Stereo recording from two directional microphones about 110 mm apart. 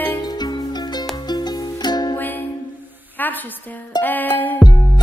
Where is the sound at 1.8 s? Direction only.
40° left (ahead or behind).